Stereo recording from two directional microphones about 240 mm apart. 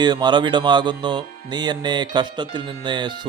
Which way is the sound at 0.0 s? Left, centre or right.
Centre.